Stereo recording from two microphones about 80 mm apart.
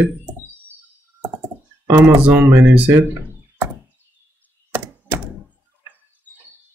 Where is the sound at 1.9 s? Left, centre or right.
Right.